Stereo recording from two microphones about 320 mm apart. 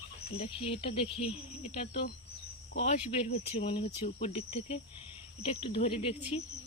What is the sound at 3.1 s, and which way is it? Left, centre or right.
Speech, centre.